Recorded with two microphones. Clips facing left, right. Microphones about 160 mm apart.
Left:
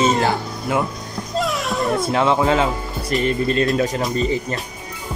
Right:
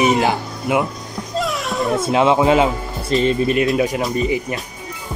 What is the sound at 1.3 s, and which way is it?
Music, centre (ahead or behind).